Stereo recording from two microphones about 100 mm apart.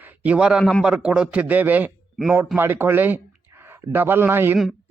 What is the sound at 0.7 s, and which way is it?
A man's voice, 5° right (ahead or behind).